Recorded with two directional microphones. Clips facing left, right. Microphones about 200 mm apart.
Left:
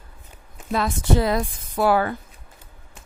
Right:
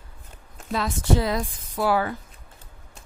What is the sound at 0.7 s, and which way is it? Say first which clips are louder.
Speech: left 2 dB; 55° left (ahead or behind).